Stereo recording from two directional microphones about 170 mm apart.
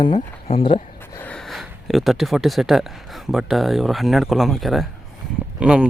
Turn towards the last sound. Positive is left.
turn(degrees=-5)  # may be behind; listen again after turning